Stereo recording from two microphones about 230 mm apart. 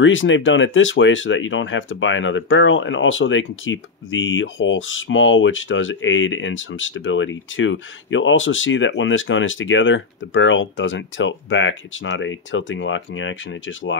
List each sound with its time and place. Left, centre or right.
0.0 s speech: left